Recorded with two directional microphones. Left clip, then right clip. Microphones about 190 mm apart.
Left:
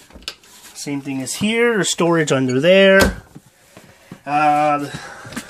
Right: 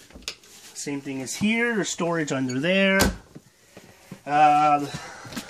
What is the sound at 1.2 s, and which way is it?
Speech, 50° left (ahead or behind).